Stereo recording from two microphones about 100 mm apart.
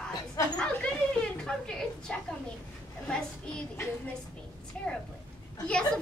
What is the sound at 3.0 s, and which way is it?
Speech, 10° left (ahead or behind).